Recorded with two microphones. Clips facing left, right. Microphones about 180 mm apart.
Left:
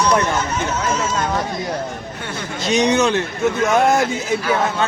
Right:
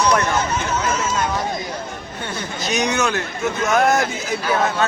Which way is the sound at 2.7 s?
30° left (ahead or behind).